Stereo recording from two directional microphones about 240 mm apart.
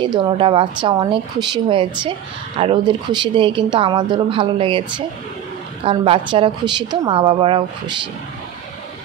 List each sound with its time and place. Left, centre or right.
0.0 s a woman's voice: centre